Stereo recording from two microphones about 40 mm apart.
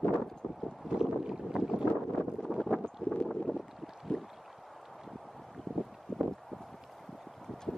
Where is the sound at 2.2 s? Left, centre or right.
Left.